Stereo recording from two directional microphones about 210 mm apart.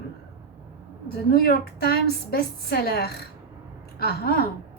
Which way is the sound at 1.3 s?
45° left (ahead or behind).